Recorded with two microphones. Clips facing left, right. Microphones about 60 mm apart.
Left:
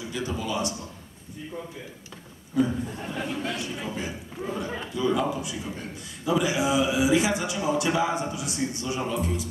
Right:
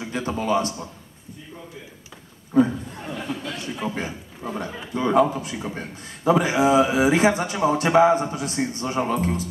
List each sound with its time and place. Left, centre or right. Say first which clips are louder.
0.0 s a man's voice: right 5 dB; right
2.6 s a man's voice: right 6 dB; right
3.2 s speech: left 1 dB; centre
3.6 s a man's voice: right 4 dB; right